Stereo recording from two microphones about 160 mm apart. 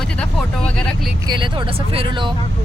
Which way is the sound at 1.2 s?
30° right (ahead or behind).